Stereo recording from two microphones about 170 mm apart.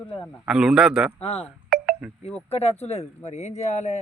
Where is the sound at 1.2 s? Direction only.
35° left (ahead or behind).